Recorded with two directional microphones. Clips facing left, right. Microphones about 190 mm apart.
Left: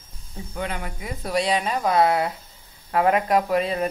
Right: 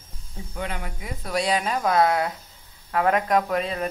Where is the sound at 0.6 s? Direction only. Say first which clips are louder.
Left 2 dB; 45° left (ahead or behind).